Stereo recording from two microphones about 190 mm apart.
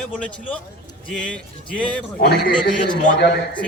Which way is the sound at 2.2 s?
55° left (ahead or behind).